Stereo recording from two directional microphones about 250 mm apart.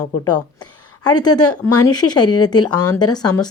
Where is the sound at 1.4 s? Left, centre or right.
Left.